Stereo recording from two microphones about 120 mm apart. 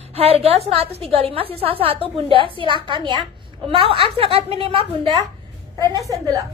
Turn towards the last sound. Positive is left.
turn(degrees=-30)  # may be behind; listen again after turning